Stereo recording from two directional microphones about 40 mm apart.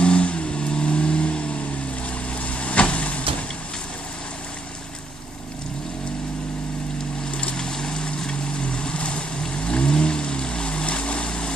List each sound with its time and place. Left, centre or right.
0.0 s vehicle: left
7.2 s vehicle: left